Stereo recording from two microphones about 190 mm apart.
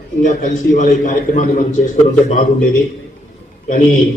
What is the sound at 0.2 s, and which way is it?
A man's voice, 40° left (ahead or behind).